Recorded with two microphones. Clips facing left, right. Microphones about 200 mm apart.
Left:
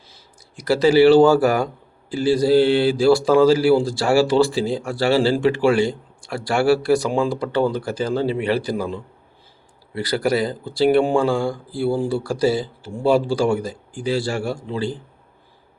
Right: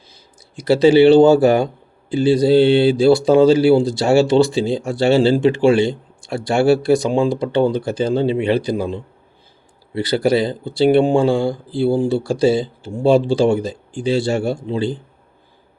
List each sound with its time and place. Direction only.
0.1 s speech: 25° right (ahead or behind)